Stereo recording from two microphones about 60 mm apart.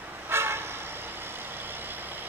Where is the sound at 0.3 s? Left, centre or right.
Right.